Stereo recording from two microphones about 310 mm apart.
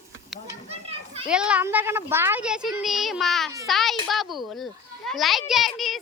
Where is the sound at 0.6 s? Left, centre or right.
Centre.